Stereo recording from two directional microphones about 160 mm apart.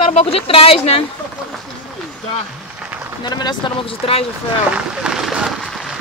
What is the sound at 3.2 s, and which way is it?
Speech, 25° left (ahead or behind).